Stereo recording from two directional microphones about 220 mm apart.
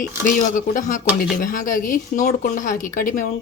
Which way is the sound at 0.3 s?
35° left (ahead or behind).